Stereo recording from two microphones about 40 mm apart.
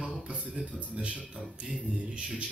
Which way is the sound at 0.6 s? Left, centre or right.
Right.